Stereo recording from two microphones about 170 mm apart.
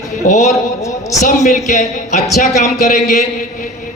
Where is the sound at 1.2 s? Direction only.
50° left (ahead or behind).